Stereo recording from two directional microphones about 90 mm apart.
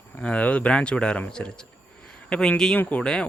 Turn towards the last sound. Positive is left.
turn(degrees=10)  # may be behind; listen again after turning